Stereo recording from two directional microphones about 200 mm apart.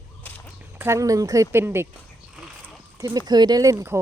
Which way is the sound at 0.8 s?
15° right (ahead or behind).